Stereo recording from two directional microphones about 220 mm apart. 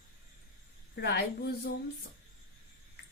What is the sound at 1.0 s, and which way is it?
Speech, 45° left (ahead or behind).